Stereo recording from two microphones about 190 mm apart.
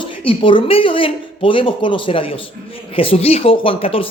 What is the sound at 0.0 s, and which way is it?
A woman's voice, 25° left (ahead or behind).